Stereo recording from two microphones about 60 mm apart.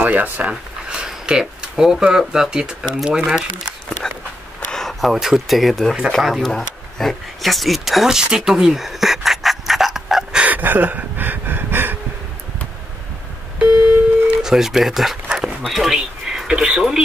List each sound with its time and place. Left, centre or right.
0.0 s speech: right
0.8 s speech: centre
4.0 s a sound: centre
5.1 s speech: centre
10.4 s a sound: right
14.2 s telephone dialing: centre
15.6 s speech: centre